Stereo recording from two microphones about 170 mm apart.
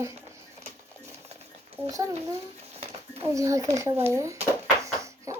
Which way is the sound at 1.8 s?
20° right (ahead or behind).